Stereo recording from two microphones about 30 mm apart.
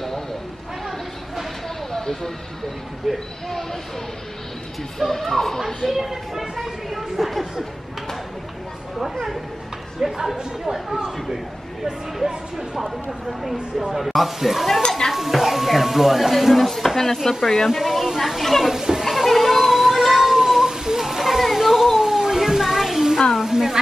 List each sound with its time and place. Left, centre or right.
1.9 s a sound: centre
3.1 s speech: centre
4.9 s speech: centre
5.9 s speech: centre
9.9 s speech: centre
13.3 s speech: centre
17.6 s speech: centre
18.4 s speech: centre
18.7 s children playing: centre
19.0 s a sound: centre
19.8 s music: centre
20.4 s a sound: centre